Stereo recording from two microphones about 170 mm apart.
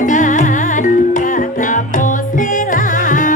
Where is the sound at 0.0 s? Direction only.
50° left (ahead or behind).